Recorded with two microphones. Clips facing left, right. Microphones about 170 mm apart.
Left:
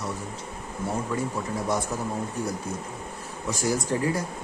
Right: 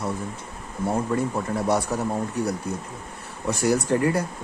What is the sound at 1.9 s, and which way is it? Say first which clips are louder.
A man's voice: right 4 dB; 70° right (ahead or behind).